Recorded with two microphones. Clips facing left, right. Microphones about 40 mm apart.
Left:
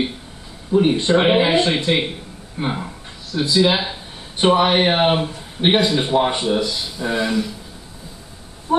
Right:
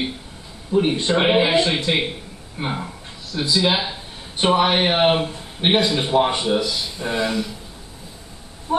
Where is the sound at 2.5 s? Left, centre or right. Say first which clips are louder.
Left 2 dB; centre.